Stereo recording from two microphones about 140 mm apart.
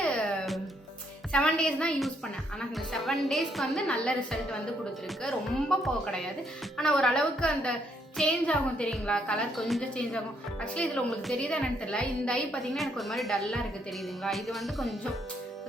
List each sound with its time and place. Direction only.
0.0 s music: 5° left (ahead or behind)
1.3 s a woman's voice: 5° left (ahead or behind)